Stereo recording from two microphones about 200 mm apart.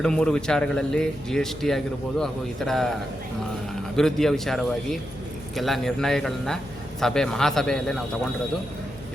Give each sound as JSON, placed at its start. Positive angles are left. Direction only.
{"t": 0.0, "sound": "speech", "side_deg": 5}
{"t": 3.9, "sound": "speech", "side_deg": 0}